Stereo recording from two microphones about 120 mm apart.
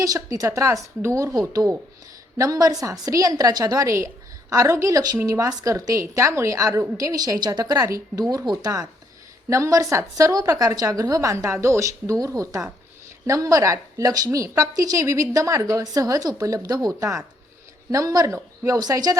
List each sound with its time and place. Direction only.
0.0 s a woman's voice: 30° right (ahead or behind)